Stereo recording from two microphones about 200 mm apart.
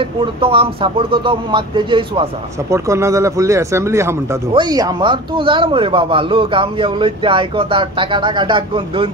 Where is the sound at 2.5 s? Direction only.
15° right (ahead or behind).